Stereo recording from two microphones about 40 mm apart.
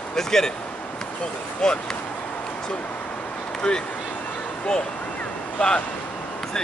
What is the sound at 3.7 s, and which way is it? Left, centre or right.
Speech, left.